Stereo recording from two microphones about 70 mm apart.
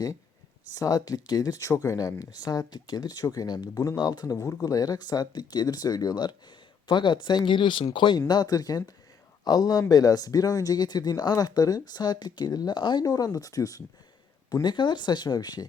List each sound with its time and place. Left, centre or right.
0.7 s speech: left
6.8 s speech: left
8.3 s speech: left
14.5 s speech: left